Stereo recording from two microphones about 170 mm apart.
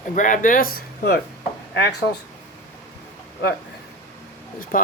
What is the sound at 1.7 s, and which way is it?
Speech, 90° left.